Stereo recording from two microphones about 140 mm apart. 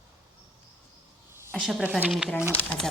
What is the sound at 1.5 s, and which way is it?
Speech, centre (ahead or behind).